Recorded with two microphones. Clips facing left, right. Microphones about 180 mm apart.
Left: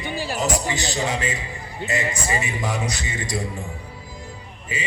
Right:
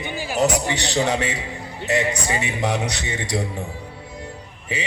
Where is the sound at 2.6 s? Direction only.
70° right (ahead or behind).